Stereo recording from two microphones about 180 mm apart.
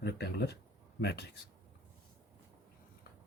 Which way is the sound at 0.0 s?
65° left (ahead or behind).